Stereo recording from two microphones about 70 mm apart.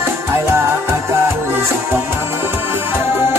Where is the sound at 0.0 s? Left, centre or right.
Right.